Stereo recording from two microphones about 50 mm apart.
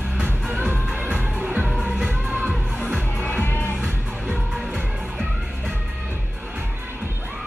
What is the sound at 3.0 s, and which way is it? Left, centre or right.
Music, left.